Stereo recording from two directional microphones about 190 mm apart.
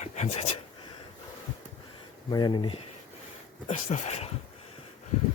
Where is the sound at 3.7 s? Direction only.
35° left (ahead or behind).